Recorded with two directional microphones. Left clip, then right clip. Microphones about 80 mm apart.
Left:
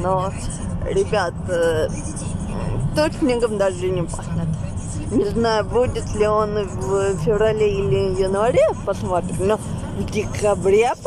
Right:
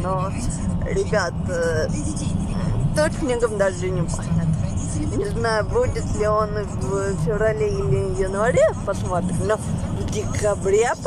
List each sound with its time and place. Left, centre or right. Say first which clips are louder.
0.0 s speech: left 4 dB; centre
3.0 s speech: left 2 dB; centre
5.2 s speech: left 3 dB; left